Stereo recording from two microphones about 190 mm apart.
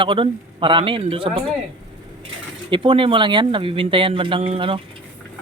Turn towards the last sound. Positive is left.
turn(degrees=-30)  # may be behind; listen again after turning